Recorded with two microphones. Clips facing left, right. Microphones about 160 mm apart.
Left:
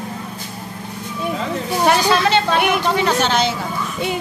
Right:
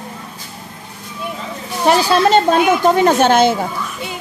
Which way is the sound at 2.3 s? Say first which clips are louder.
Right 5 dB; 45° right (ahead or behind).